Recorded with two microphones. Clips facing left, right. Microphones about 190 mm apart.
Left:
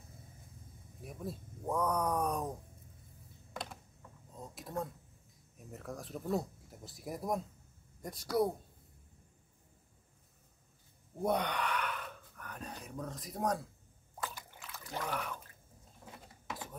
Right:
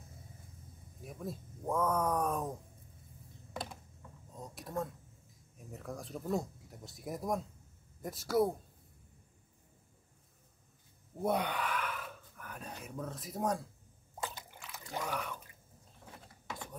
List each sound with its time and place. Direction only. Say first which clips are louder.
1.0 s speech: even; centre (ahead or behind)
4.4 s a sound: right 1 dB; centre (ahead or behind)
5.7 s speech: right 1 dB; centre (ahead or behind)
11.2 s gasp: even; 5° right (ahead or behind)
14.7 s a sound: right 1 dB; 15° right (ahead or behind)
15.1 s speech: even; centre (ahead or behind)